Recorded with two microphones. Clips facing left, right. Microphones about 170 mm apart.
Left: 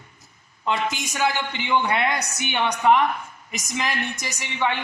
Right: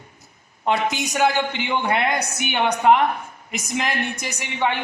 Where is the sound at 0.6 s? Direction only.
65° right (ahead or behind).